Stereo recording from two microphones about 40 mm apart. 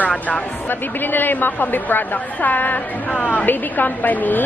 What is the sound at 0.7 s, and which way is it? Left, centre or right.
Speech, left.